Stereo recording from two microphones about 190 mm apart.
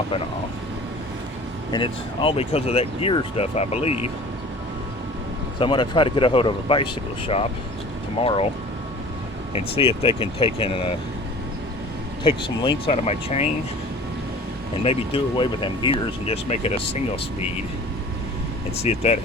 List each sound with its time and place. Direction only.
1.7 s speech: 25° left (ahead or behind)
5.5 s speech: 25° left (ahead or behind)
8.2 s speech: 30° left (ahead or behind)
9.5 s speech: 30° left (ahead or behind)
12.2 s speech: 30° left (ahead or behind)
14.8 s speech: 25° left (ahead or behind)
18.8 s speech: 35° left (ahead or behind)